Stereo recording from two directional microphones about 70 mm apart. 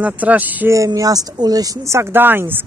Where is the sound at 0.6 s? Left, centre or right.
Right.